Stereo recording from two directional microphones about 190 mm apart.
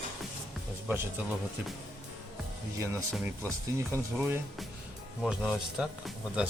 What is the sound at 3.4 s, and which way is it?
Speech, 15° right (ahead or behind).